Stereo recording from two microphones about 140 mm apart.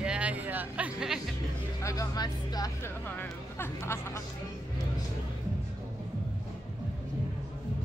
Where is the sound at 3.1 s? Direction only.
15° left (ahead or behind).